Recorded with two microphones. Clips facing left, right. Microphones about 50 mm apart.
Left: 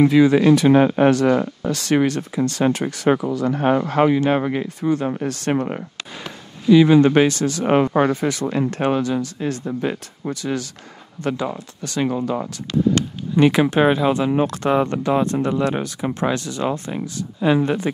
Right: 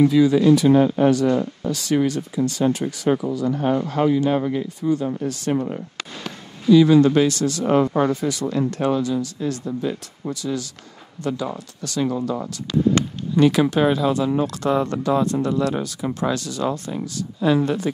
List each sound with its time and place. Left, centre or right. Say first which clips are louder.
0.1 s speech: left 2 dB; left
6.7 s speech: left 1 dB; left
7.6 s speech: left 2 dB; left
8.9 s speech: left 1 dB; left